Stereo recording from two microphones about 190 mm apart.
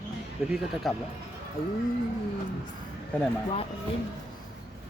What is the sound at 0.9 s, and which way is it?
Speech, centre (ahead or behind).